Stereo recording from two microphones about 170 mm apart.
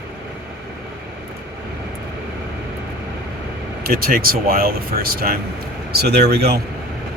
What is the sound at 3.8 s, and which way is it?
Speech, 60° right (ahead or behind).